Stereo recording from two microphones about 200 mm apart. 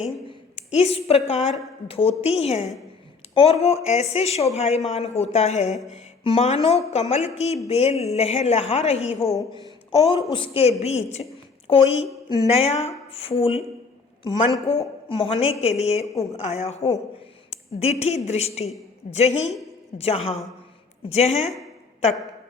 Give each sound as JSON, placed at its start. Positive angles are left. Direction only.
{"t": 0.3, "sound": "a woman's voice", "side_deg": 30}
{"t": 14.7, "sound": "a woman's voice", "side_deg": 30}